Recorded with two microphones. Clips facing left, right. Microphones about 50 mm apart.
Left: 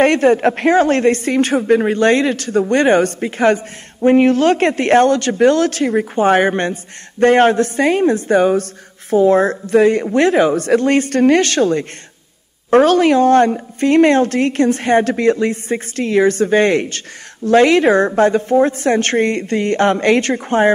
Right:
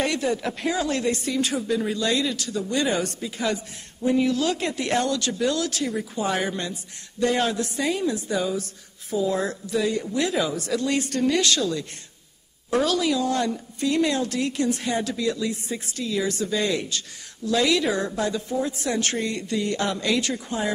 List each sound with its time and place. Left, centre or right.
0.0 s speech: left